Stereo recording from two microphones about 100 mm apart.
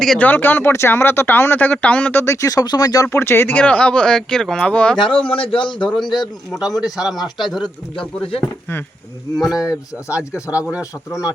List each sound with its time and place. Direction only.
0.2 s speech: 15° left (ahead or behind)
2.2 s speech: 30° left (ahead or behind)
3.1 s speech: 25° left (ahead or behind); by 4.9 s 10° left (ahead or behind)
4.9 s speech: 55° left (ahead or behind)
6.6 s speech: 5° right (ahead or behind)
7.6 s speech: 65° left (ahead or behind)
9.4 s speech: 5° right (ahead or behind)